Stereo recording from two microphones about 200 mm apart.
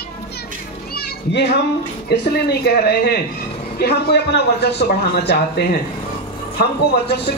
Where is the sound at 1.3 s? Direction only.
60° left (ahead or behind).